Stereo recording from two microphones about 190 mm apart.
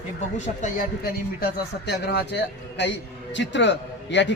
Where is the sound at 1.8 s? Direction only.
60° left (ahead or behind).